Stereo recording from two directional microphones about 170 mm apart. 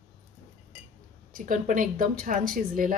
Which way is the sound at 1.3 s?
50° right (ahead or behind).